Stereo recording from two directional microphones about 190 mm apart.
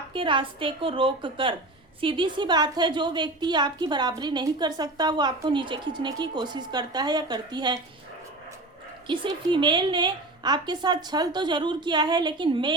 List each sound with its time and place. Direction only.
0.1 s a woman's voice: 25° right (ahead or behind)
9.0 s a woman's voice: 25° right (ahead or behind)